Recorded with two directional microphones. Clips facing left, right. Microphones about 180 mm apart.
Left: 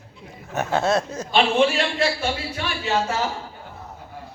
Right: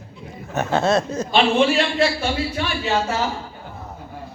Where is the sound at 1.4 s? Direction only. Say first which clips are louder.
Right 1 dB; 45° left (ahead or behind).